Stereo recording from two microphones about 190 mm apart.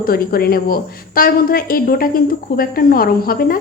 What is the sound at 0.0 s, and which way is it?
A woman's voice, 50° left (ahead or behind).